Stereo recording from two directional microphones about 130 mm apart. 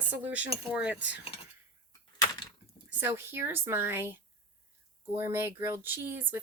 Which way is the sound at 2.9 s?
15° right (ahead or behind).